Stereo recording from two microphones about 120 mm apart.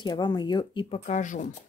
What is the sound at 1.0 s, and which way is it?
Speech, 90° left.